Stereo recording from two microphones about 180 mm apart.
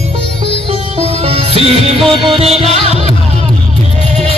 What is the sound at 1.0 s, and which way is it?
Music, 35° right (ahead or behind).